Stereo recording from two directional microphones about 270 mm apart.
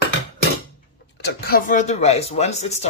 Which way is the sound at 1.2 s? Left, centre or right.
Left.